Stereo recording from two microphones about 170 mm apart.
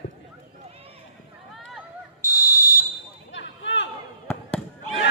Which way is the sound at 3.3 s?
90° left.